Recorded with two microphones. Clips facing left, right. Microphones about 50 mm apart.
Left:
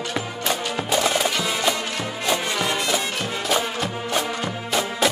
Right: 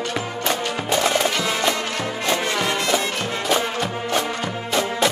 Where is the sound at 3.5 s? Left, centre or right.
Centre.